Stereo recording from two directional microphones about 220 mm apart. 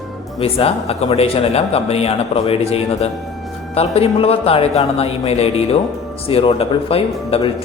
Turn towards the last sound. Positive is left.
turn(degrees=25)  # may be behind; listen again after turning